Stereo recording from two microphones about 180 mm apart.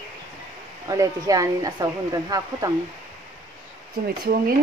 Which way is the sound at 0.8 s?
20° right (ahead or behind).